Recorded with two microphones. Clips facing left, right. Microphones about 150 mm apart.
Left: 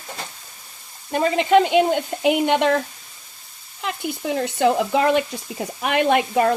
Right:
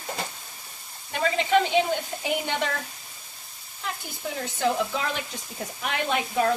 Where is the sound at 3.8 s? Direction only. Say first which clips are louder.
Left 8 dB; 80° left.